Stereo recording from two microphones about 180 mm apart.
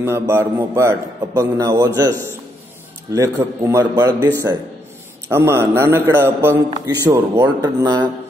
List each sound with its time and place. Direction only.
0.0 s a man's voice: 15° right (ahead or behind)
5.3 s a man's voice: 15° right (ahead or behind)